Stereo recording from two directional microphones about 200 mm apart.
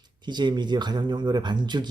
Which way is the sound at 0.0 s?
20° right (ahead or behind).